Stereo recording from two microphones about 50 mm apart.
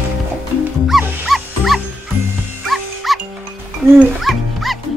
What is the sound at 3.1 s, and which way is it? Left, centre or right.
Music, centre.